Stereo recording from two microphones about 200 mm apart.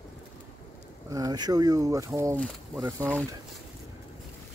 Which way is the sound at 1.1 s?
20° right (ahead or behind).